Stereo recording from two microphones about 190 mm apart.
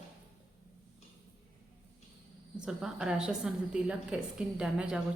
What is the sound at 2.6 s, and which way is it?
A woman's voice, 5° right (ahead or behind).